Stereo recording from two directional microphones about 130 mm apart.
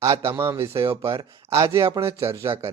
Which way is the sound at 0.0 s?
25° right (ahead or behind).